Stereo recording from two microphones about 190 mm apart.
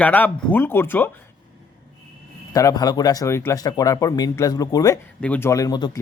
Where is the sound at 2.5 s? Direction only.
20° left (ahead or behind).